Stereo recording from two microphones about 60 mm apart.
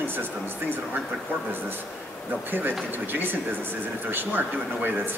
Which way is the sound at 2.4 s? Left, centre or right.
Right.